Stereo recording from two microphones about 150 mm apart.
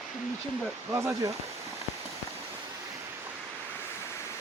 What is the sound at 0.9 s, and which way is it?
Speech, 20° right (ahead or behind).